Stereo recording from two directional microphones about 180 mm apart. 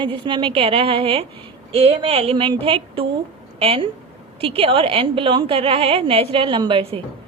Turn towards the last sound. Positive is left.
turn(degrees=-30)  # may be behind; listen again after turning